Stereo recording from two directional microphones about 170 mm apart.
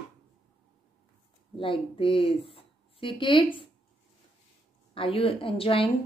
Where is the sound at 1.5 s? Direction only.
30° left (ahead or behind).